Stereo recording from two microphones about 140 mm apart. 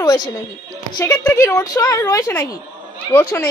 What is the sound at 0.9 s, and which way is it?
A woman's voice, 25° left (ahead or behind).